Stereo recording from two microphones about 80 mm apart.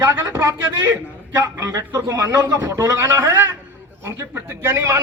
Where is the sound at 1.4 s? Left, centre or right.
Right.